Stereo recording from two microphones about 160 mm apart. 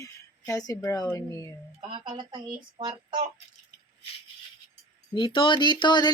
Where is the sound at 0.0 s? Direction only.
20° left (ahead or behind).